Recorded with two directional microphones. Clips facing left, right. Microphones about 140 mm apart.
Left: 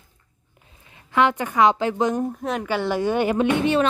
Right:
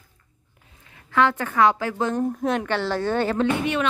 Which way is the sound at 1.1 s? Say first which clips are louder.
Left 1 dB; 15° left (ahead or behind).